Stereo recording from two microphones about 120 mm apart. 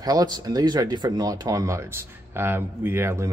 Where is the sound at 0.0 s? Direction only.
30° right (ahead or behind).